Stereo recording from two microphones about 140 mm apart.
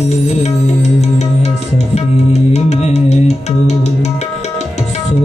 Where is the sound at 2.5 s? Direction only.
55° left (ahead or behind).